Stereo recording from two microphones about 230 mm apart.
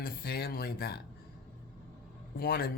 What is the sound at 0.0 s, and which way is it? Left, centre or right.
Speech, left.